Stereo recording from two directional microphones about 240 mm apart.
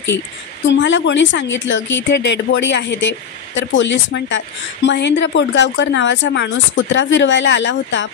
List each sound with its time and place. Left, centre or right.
0.7 s a woman's voice: left